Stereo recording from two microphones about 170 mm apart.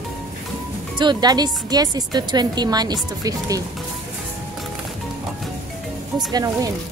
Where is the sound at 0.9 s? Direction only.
25° right (ahead or behind).